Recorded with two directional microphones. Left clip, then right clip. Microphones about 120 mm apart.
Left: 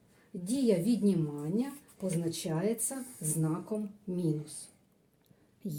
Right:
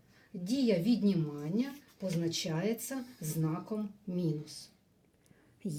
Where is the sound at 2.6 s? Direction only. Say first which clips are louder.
Left 2 dB; 50° left (ahead or behind).